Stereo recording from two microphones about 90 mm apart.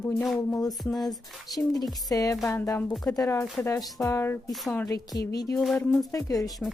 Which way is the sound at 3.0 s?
45° left (ahead or behind).